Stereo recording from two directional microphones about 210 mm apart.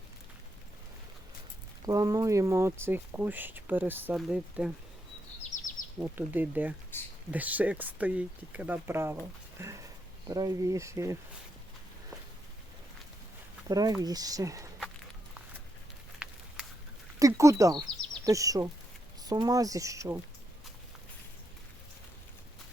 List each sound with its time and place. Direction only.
1.9 s speech: 15° right (ahead or behind)
5.4 s bird vocalization: 35° left (ahead or behind)
6.0 s speech: 10° right (ahead or behind)
13.7 s speech: 15° right (ahead or behind)
16.1 s a sound: 5° right (ahead or behind)
17.2 s speech: 15° right (ahead or behind)